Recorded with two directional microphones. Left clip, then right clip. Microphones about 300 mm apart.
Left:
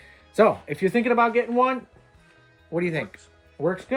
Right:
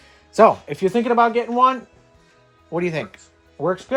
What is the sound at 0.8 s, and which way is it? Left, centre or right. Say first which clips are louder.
Speech: right 3 dB; centre.